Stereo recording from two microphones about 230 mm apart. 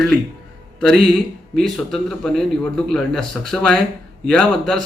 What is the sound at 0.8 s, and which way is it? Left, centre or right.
A man's voice, centre.